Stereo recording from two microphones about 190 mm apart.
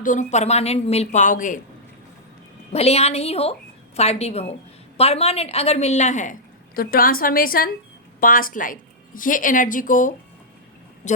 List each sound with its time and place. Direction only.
0.0 s a woman's voice: 40° left (ahead or behind)
2.7 s a woman's voice: 35° left (ahead or behind)
6.7 s a woman's voice: 50° left (ahead or behind)